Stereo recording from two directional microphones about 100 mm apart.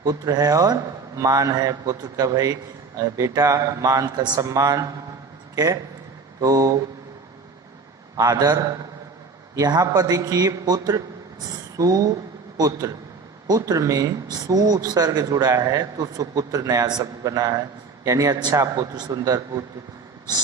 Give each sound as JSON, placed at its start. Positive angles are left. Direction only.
{"t": 0.0, "sound": "speech", "side_deg": -40}
{"t": 8.1, "sound": "speech", "side_deg": -40}